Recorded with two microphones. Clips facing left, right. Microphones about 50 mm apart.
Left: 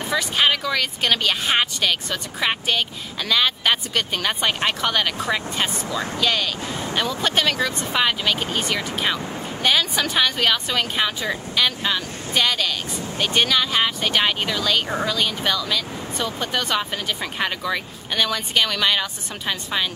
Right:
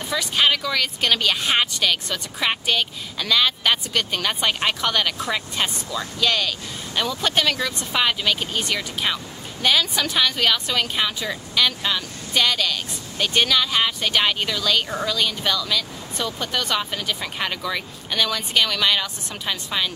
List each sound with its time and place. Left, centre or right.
0.1 s speech: centre
5.9 s speech: left
6.2 s speech: centre